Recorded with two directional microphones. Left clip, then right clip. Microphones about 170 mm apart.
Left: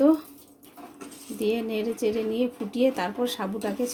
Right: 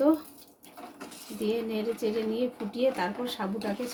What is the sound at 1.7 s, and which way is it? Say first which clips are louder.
Speech: left 3 dB; 40° left (ahead or behind).